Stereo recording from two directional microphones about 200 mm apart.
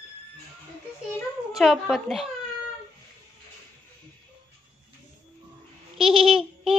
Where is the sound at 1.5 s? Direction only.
Centre (ahead or behind).